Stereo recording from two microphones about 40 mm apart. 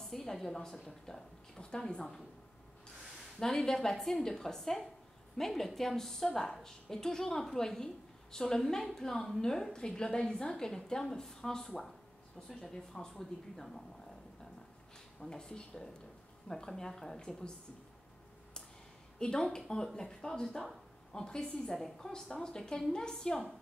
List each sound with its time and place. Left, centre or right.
0.0 s a woman's voice: centre
3.3 s a woman's voice: centre
15.2 s a woman's voice: centre
19.1 s a woman's voice: left
20.4 s speech: centre
21.1 s a woman's voice: centre
21.7 s a woman's voice: centre
22.1 s a woman's voice: centre